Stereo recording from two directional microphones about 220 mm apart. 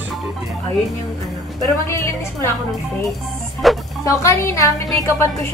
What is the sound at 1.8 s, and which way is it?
Speech, 15° left (ahead or behind).